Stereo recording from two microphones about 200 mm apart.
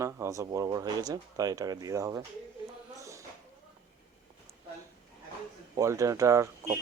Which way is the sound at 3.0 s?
15° right (ahead or behind).